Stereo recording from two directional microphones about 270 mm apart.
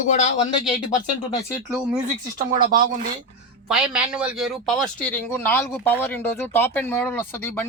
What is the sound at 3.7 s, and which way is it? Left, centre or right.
Speech, centre.